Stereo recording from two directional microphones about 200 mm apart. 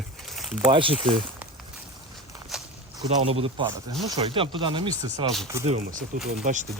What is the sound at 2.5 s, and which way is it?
Walk, centre (ahead or behind).